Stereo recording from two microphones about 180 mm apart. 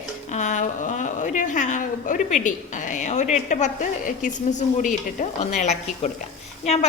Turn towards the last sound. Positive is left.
turn(degrees=35)  # may be behind; listen again after turning